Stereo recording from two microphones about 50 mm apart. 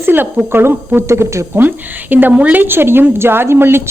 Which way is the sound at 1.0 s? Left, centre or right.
Right.